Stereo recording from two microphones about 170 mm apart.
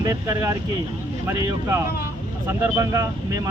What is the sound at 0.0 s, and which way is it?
Speech, 20° right (ahead or behind).